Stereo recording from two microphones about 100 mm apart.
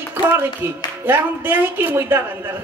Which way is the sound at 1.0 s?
20° right (ahead or behind).